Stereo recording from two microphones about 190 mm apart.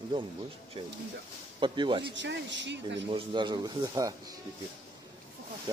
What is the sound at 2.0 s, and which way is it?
Speech, 70° right (ahead or behind).